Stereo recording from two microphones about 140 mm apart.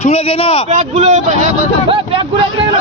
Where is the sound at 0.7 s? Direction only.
55° right (ahead or behind).